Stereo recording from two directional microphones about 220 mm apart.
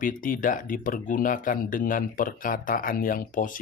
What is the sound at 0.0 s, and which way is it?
Speech, 40° left (ahead or behind).